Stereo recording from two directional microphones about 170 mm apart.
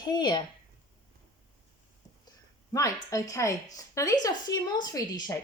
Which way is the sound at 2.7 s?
20° left (ahead or behind).